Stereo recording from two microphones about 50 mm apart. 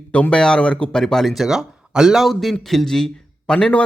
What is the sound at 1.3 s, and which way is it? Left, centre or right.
Speech, centre.